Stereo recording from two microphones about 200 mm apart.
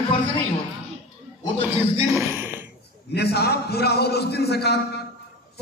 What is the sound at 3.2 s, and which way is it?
A man's voice, 55° left (ahead or behind).